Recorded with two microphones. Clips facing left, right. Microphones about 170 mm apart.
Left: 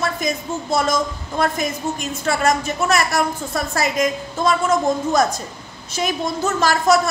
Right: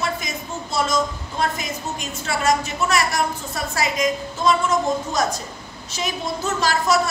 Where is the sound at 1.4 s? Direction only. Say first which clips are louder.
Left 4 dB; 50° left (ahead or behind).